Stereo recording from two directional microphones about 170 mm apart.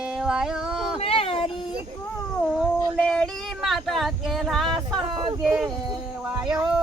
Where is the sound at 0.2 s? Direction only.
5° right (ahead or behind).